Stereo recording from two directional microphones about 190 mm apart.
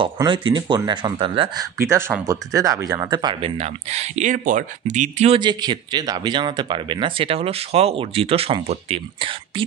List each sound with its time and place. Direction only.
0.0 s speech: 25° right (ahead or behind)